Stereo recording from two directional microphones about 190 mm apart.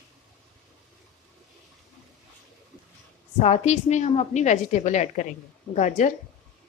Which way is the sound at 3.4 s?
35° left (ahead or behind).